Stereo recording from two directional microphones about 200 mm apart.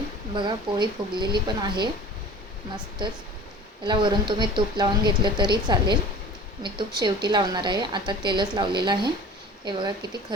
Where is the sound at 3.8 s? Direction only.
25° right (ahead or behind).